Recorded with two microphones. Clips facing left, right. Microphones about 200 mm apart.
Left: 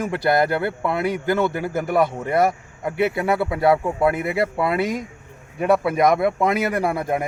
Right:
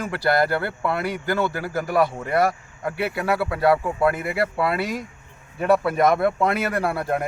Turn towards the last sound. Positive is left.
turn(degrees=15)  # may be behind; listen again after turning